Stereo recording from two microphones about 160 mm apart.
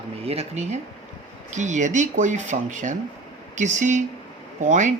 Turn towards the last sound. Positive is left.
turn(degrees=-50)  # may be behind; listen again after turning